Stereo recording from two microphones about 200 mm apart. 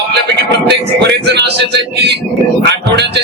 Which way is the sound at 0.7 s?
55° right (ahead or behind).